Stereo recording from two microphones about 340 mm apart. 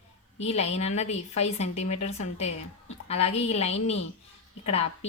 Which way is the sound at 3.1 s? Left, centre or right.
Centre.